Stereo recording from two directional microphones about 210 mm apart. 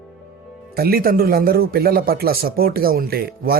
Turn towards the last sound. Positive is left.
turn(degrees=-45)  # may be behind; listen again after turning